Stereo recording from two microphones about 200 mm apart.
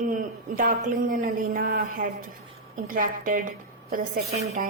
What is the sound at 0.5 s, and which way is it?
A woman's voice, 45° right (ahead or behind).